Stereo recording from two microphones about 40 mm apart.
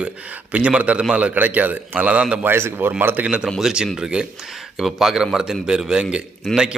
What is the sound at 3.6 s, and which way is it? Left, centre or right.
Speech, centre.